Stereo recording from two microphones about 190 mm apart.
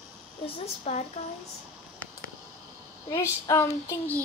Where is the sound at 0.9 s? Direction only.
30° left (ahead or behind).